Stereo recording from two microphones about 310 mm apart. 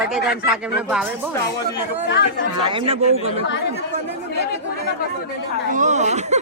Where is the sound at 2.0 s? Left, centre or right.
Left.